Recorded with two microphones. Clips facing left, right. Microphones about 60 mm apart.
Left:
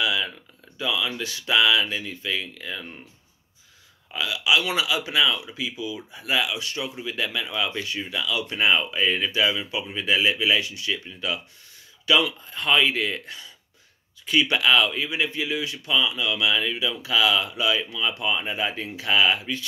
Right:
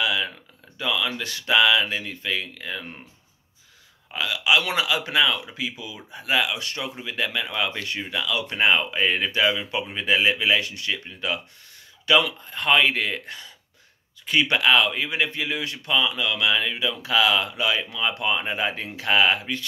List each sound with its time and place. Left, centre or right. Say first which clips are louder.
0.0 s a sound: even; right
0.7 s speech: right 1 dB; right
4.1 s speech: right 1 dB; right